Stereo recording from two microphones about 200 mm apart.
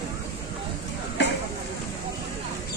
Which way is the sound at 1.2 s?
60° left (ahead or behind).